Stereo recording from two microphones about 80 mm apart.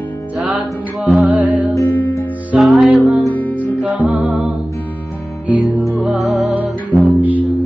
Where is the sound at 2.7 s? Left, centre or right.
Centre.